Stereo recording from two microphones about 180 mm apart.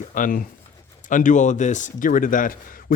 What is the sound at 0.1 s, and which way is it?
A man's voice, 50° left (ahead or behind).